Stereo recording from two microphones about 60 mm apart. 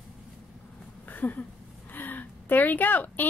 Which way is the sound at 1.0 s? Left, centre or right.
Left.